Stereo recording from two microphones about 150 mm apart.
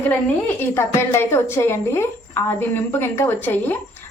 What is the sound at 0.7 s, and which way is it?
Speech, 15° left (ahead or behind).